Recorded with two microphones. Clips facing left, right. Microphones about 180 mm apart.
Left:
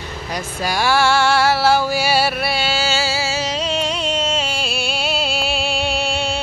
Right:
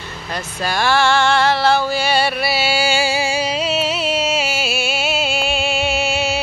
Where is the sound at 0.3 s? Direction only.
10° left (ahead or behind).